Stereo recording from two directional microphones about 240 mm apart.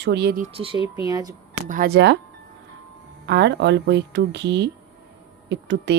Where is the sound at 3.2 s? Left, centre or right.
Right.